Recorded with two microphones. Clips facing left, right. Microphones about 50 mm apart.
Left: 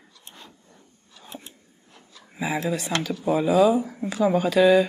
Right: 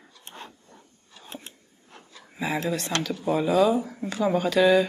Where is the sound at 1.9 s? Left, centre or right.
Right.